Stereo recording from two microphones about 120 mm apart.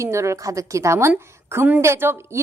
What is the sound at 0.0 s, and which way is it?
A woman's voice, 25° right (ahead or behind).